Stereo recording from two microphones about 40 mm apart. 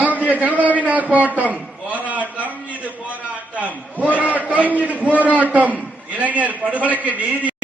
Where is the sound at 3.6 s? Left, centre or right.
Right.